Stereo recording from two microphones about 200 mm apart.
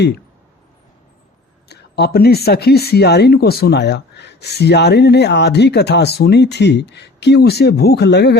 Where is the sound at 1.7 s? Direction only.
55° left (ahead or behind).